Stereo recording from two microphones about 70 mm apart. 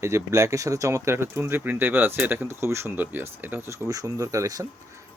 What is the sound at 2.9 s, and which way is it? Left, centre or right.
Speech, right.